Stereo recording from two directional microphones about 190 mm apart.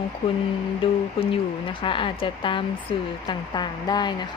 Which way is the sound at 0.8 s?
30° left (ahead or behind).